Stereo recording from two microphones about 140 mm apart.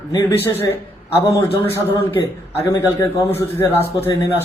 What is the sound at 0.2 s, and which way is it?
Speech, 15° left (ahead or behind).